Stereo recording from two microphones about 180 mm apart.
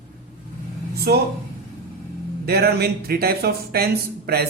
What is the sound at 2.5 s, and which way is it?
Speech, 60° right (ahead or behind).